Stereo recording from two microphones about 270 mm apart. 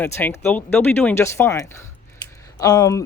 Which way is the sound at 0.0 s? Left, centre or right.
Centre.